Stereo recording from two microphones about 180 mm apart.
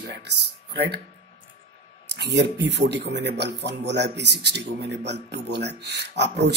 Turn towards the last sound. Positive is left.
turn(degrees=-70)  # may be behind; listen again after turning